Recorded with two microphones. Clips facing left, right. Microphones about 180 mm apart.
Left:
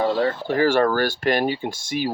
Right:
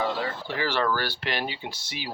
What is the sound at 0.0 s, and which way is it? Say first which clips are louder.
Speech: left 8 dB; 45° left (ahead or behind).